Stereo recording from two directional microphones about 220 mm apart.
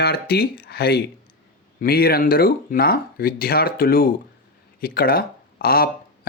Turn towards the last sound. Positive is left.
turn(degrees=45)  # may be behind; listen again after turning